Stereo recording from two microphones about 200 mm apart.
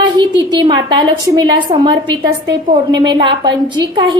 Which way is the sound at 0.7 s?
25° right (ahead or behind).